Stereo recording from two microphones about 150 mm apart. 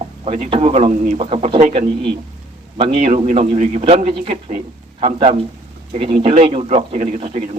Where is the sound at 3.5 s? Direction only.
55° right (ahead or behind).